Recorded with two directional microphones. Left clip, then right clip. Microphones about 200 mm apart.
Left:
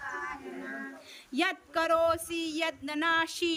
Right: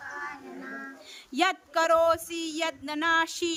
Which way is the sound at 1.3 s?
5° right (ahead or behind).